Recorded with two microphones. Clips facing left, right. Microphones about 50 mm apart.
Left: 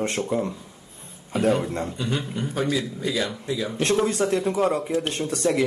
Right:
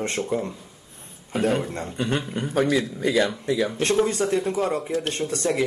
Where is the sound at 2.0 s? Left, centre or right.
Right.